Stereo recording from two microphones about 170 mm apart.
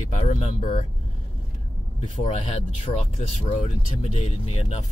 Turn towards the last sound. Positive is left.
turn(degrees=40)  # may be behind; listen again after turning